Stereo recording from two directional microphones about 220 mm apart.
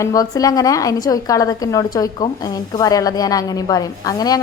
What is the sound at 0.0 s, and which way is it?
A woman's voice, 15° left (ahead or behind).